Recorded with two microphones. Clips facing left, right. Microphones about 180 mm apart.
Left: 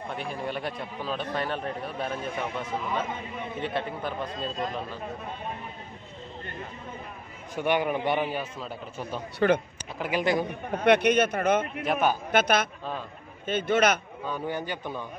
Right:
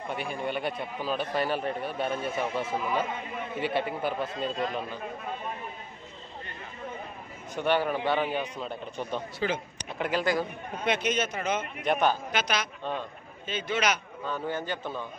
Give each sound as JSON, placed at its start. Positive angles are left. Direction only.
{"t": 0.1, "sound": "a man's voice", "side_deg": 0}
{"t": 7.6, "sound": "a man's voice", "side_deg": 15}
{"t": 9.4, "sound": "a man's voice", "side_deg": 55}
{"t": 9.9, "sound": "a man's voice", "side_deg": 5}
{"t": 10.7, "sound": "a man's voice", "side_deg": 60}
{"t": 11.8, "sound": "a man's voice", "side_deg": 5}
{"t": 12.3, "sound": "a man's voice", "side_deg": 55}
{"t": 14.2, "sound": "a man's voice", "side_deg": 15}